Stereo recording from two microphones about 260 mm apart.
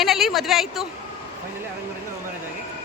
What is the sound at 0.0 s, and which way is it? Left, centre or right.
Speech, centre.